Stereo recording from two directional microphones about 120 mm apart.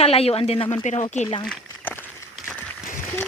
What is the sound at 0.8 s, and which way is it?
Speech, 70° left (ahead or behind).